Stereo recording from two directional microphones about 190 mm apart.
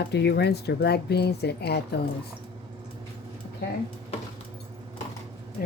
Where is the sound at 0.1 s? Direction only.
60° left (ahead or behind).